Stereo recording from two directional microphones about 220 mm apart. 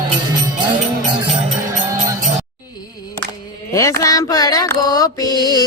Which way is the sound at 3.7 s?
15° left (ahead or behind).